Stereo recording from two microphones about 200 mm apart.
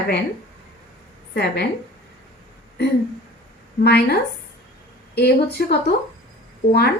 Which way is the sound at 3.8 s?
55° left (ahead or behind).